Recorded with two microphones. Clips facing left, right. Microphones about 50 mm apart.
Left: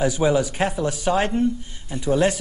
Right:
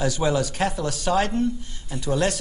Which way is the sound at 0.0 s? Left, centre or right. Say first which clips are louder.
Left 3 dB; centre.